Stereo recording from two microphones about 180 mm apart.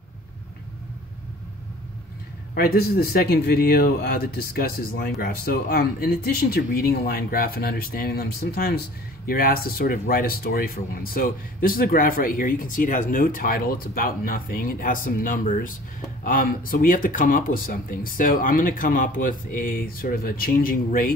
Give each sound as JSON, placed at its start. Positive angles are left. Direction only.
{"t": 2.5, "sound": "speech", "side_deg": 60}